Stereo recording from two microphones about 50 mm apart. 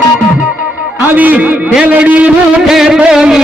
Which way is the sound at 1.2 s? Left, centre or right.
Right.